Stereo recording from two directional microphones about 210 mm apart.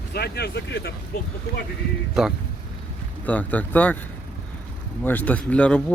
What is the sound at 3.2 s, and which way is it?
Speech, 5° left (ahead or behind).